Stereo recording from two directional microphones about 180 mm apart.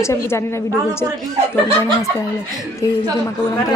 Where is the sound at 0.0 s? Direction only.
15° left (ahead or behind).